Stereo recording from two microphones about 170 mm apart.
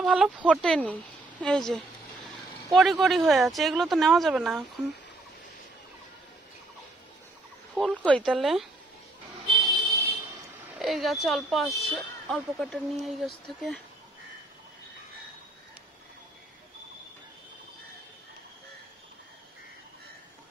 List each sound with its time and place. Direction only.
0.0 s speech: 5° right (ahead or behind)
7.7 s speech: 5° right (ahead or behind)
9.5 s vehicle: 25° right (ahead or behind)
10.8 s speech: centre (ahead or behind)